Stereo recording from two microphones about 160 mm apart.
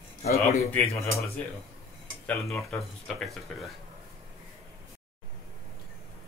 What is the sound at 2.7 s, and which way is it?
Speech, centre (ahead or behind).